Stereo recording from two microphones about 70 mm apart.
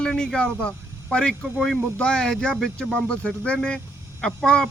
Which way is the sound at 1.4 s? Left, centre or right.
Right.